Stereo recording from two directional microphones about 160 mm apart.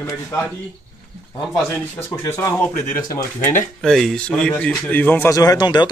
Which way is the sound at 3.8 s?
Centre (ahead or behind).